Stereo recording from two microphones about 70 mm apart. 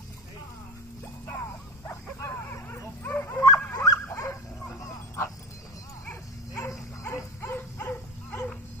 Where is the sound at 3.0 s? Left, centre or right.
Left.